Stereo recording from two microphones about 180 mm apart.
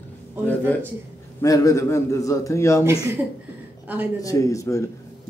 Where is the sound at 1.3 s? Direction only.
20° left (ahead or behind).